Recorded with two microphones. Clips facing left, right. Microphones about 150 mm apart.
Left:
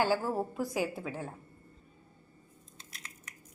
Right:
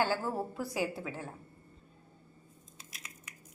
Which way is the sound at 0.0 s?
15° left (ahead or behind).